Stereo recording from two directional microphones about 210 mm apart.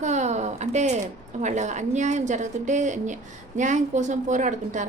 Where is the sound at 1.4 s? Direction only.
35° right (ahead or behind).